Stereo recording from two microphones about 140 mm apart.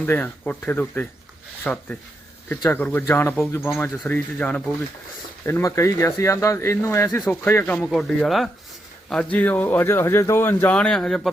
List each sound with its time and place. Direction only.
0.0 s speech: 10° left (ahead or behind)
5.5 s speech: 20° left (ahead or behind)
7.9 s speech: centre (ahead or behind)